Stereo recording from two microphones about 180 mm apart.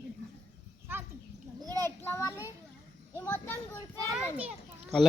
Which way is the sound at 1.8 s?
15° left (ahead or behind).